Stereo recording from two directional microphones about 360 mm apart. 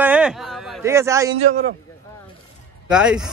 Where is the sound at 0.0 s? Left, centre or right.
Centre.